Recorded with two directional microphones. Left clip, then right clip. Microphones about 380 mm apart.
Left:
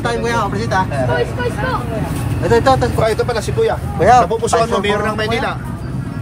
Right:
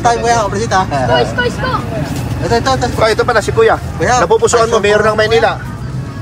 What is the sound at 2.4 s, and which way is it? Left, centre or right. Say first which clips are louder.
Speech: left 1 dB; centre.